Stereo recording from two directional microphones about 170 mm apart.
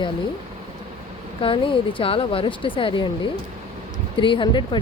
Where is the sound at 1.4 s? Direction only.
30° left (ahead or behind).